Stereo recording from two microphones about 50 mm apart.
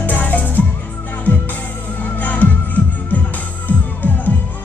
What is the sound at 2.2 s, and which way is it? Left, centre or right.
Music, left.